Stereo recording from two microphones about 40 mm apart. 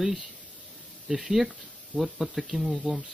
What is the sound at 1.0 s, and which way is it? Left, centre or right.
Speech, centre.